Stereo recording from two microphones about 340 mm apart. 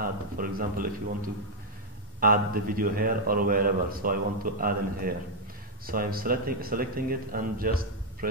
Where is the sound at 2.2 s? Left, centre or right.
Right.